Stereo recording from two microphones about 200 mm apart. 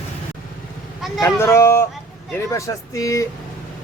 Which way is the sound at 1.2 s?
15° left (ahead or behind).